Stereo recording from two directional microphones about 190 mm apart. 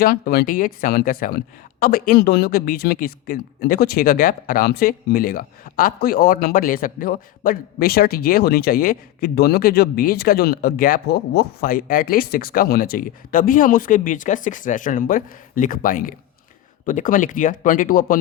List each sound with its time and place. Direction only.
0.0 s speech: 55° left (ahead or behind)